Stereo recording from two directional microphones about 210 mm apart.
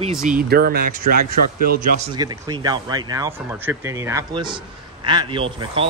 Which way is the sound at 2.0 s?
20° right (ahead or behind).